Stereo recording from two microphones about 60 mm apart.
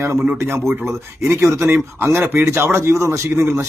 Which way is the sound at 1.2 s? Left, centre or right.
Right.